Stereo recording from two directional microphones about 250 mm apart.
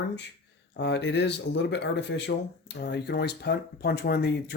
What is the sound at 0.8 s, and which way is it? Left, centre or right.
Speech, left.